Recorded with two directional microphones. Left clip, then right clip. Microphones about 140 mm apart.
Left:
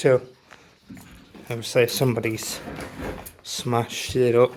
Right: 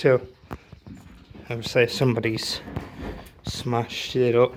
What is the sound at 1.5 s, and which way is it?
Speech, 25° left (ahead or behind).